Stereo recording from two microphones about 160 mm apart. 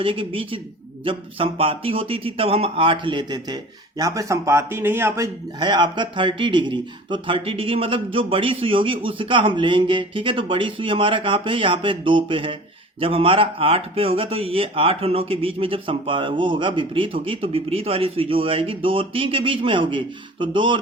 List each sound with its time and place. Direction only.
0.0 s speech: 35° right (ahead or behind)